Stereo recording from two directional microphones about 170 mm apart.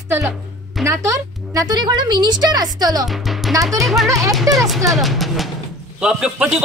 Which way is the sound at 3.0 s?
Centre (ahead or behind).